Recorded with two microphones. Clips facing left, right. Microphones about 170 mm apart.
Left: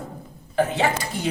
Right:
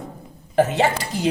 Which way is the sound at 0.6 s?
90° right.